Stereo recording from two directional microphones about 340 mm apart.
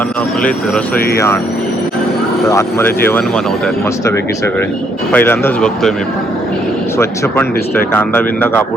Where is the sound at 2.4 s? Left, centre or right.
Centre.